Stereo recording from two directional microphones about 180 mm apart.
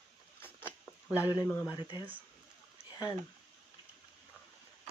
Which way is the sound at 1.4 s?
15° left (ahead or behind).